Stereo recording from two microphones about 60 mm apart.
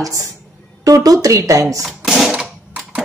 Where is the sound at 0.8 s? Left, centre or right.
Right.